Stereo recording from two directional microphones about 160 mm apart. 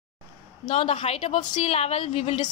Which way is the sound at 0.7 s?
40° left (ahead or behind).